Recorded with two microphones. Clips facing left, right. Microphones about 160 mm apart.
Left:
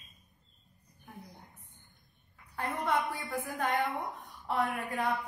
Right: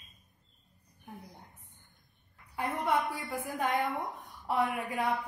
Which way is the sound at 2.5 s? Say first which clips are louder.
Right 1 dB; 5° right (ahead or behind).